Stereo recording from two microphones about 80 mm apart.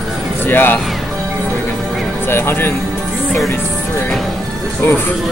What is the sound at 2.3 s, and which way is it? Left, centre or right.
Speech, left.